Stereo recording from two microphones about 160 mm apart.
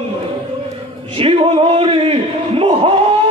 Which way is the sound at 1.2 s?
35° right (ahead or behind).